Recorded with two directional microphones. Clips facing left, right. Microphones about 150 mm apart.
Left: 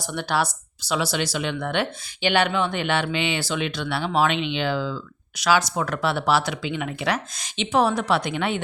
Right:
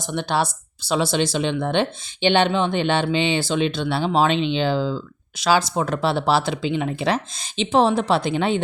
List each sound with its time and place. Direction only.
0.0 s speech: 20° right (ahead or behind)